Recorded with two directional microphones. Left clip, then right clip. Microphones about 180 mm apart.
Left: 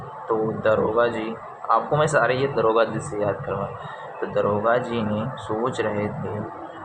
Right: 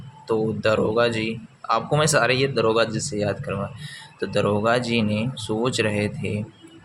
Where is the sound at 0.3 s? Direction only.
75° right (ahead or behind).